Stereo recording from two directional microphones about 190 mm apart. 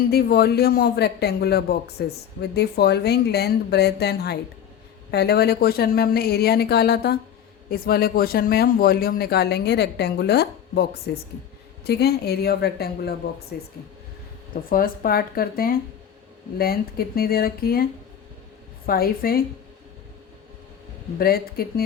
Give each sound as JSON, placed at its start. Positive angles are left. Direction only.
{"t": 0.1, "sound": "speech", "side_deg": 55}
{"t": 18.9, "sound": "speech", "side_deg": 50}
{"t": 21.2, "sound": "speech", "side_deg": 50}